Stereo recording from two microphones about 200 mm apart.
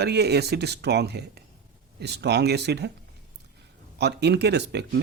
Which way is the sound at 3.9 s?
55° right (ahead or behind).